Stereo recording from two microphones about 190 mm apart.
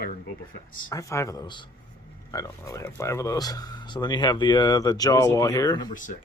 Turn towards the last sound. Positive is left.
turn(degrees=20)  # may be behind; listen again after turning